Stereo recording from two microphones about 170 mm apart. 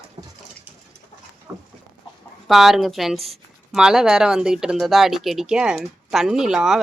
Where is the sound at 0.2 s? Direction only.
30° right (ahead or behind).